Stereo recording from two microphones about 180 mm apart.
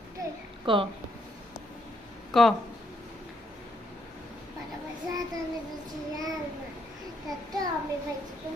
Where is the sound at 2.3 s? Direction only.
Centre (ahead or behind).